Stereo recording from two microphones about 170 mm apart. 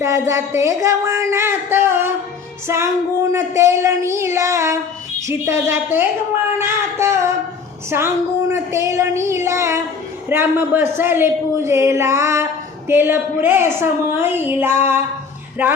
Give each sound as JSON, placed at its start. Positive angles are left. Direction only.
{"t": 0.0, "sound": "a man's voice", "side_deg": -15}